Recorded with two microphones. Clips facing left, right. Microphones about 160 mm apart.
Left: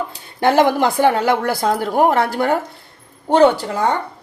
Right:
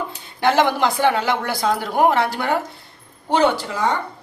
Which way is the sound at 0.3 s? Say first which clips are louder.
Left 3 dB; 45° left (ahead or behind).